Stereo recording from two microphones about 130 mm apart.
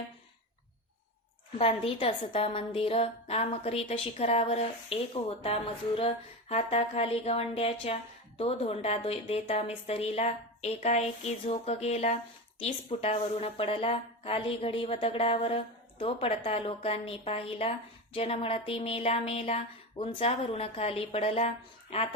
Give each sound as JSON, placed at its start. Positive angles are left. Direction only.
{"t": 1.5, "sound": "a woman's voice", "side_deg": 50}
{"t": 12.5, "sound": "a woman's voice", "side_deg": 50}